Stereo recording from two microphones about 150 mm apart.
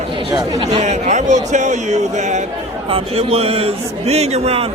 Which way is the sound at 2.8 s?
40° right (ahead or behind).